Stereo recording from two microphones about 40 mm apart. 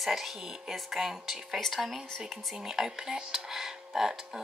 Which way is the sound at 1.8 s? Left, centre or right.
Centre.